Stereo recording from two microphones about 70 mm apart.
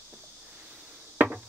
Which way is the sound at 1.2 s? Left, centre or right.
Right.